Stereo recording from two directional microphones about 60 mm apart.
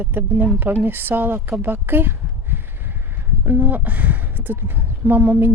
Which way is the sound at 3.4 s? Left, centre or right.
Right.